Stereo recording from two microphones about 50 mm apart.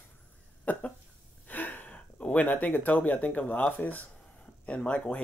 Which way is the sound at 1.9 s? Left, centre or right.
Left.